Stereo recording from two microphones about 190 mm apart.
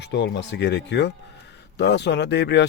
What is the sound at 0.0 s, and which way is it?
Speech, 65° left (ahead or behind).